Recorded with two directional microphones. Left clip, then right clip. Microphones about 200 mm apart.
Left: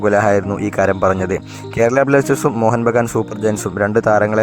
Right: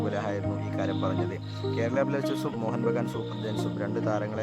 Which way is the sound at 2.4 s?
30° left (ahead or behind).